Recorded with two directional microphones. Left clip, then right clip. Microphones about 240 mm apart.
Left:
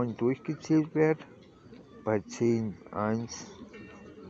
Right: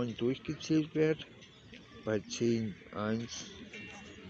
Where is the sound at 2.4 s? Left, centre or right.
Centre.